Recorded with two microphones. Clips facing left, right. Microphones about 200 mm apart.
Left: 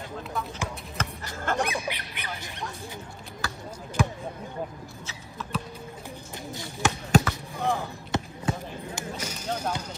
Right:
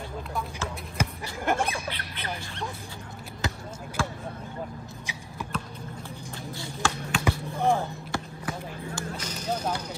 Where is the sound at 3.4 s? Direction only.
20° right (ahead or behind).